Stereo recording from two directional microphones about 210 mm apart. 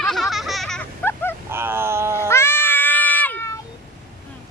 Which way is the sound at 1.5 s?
10° right (ahead or behind).